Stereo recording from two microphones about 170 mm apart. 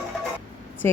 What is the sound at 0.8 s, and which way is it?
Speech, 15° left (ahead or behind).